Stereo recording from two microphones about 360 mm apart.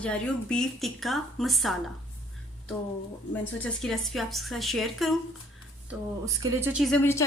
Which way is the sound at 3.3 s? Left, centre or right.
Centre.